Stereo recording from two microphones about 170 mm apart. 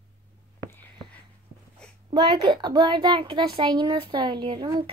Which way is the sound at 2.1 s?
25° right (ahead or behind).